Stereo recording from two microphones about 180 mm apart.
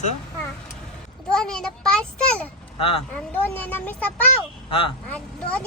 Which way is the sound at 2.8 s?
30° left (ahead or behind).